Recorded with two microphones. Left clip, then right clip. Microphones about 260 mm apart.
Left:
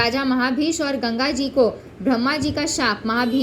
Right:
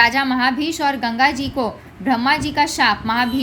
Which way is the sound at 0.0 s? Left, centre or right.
Centre.